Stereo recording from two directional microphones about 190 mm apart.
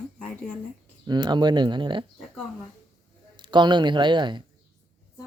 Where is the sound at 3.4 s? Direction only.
25° right (ahead or behind).